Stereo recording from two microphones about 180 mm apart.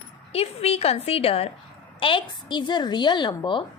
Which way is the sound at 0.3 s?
35° left (ahead or behind).